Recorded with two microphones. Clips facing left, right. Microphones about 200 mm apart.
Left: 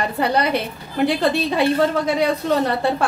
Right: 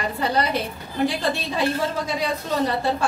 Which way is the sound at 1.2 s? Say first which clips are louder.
Left 6 dB; 65° left (ahead or behind).